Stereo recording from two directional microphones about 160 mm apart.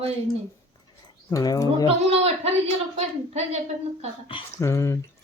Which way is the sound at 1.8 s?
40° right (ahead or behind).